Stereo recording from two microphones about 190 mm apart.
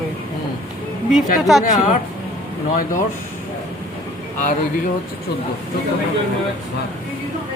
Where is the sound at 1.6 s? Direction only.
40° left (ahead or behind).